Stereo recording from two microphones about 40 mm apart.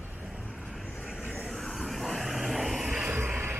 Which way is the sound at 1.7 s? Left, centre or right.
Centre.